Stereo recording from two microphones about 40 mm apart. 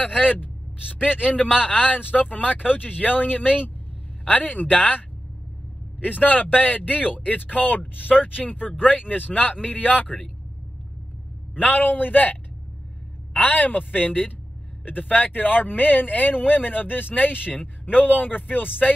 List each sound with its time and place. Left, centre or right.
0.2 s speech: left
0.7 s a man's voice: right
1.0 s speech: left
6.0 s speech: left
11.5 s speech: left